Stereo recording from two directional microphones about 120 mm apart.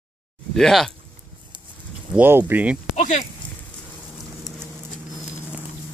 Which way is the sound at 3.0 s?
80° left.